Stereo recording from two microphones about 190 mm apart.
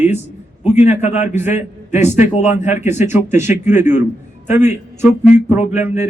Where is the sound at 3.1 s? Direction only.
10° right (ahead or behind).